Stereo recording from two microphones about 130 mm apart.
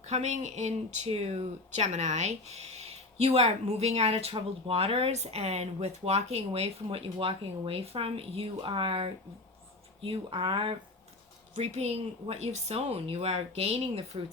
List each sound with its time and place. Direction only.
0.0 s speech: 60° right (ahead or behind); by 10.8 s 40° right (ahead or behind)
11.6 s a woman's voice: 60° right (ahead or behind)